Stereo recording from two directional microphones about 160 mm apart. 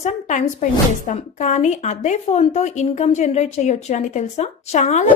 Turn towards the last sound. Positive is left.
turn(degrees=45)  # may be behind; listen again after turning